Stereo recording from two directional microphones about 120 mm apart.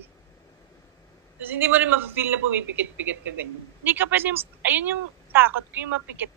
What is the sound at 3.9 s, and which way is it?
Speech, 15° right (ahead or behind).